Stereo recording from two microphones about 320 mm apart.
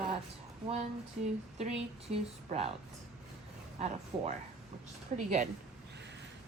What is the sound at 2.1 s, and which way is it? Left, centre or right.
Speech, centre.